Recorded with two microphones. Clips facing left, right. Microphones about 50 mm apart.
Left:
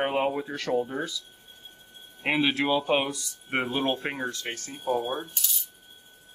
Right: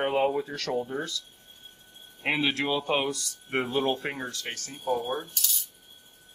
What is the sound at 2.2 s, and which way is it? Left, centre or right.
Speech, centre.